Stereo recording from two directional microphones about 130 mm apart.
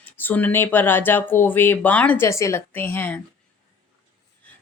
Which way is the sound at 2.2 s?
25° left (ahead or behind).